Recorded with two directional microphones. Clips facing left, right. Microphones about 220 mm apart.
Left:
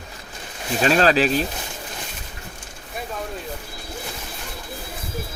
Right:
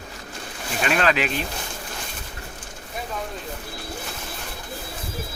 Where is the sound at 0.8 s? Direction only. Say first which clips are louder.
Left 5 dB; 35° left (ahead or behind).